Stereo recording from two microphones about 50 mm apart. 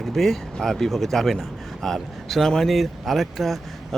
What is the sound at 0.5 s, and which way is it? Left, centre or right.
Speech, centre.